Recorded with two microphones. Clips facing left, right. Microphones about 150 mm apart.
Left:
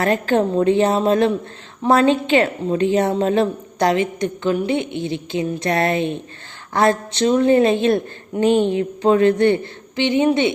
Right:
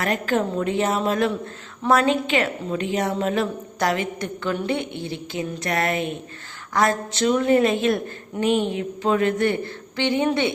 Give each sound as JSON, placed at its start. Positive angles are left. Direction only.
{"t": 0.0, "sound": "a woman's voice", "side_deg": 30}